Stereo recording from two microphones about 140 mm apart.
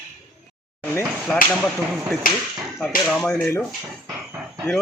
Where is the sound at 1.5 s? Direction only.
5° left (ahead or behind).